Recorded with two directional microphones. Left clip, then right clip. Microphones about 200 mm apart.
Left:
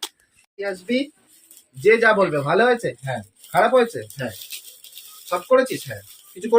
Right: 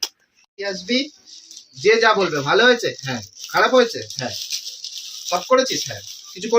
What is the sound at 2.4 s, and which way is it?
Speech, 45° right (ahead or behind).